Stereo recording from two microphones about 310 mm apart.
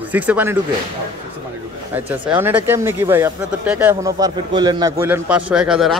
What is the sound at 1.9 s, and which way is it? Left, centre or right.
Speech, centre.